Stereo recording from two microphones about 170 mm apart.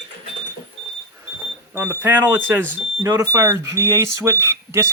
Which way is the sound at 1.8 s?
10° right (ahead or behind).